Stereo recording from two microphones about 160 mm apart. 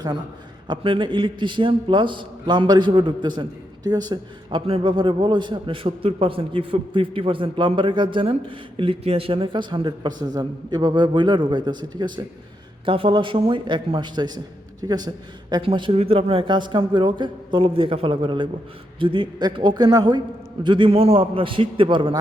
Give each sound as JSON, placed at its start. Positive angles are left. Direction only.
{"t": 0.7, "sound": "a man's voice", "side_deg": -30}